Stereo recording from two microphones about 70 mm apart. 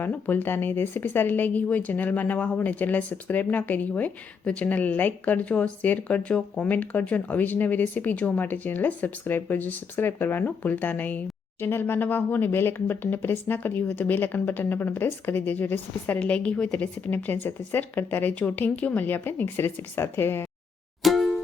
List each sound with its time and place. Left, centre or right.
0.0 s speech: left
16.8 s speech: left
21.0 s music: centre